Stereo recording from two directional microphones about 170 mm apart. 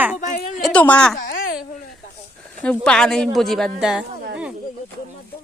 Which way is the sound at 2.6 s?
5° left (ahead or behind).